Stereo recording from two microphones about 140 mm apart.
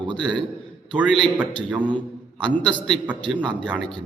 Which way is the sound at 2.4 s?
5° left (ahead or behind).